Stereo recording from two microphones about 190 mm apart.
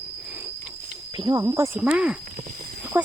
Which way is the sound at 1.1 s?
20° right (ahead or behind).